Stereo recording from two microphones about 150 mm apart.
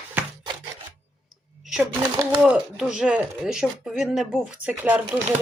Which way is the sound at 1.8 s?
20° right (ahead or behind).